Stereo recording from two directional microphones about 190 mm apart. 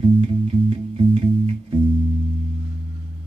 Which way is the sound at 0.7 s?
30° right (ahead or behind).